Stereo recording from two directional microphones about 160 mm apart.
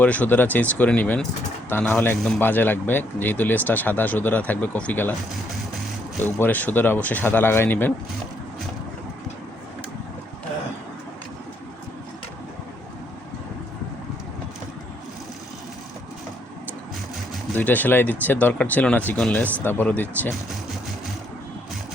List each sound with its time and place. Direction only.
0.0 s speech: 10° left (ahead or behind)
6.4 s speech: 10° left (ahead or behind)
17.5 s speech: 10° left (ahead or behind)